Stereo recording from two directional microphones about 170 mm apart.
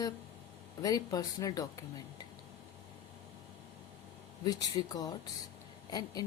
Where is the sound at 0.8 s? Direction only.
20° left (ahead or behind).